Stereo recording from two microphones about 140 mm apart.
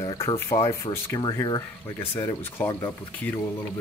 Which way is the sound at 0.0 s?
25° left (ahead or behind).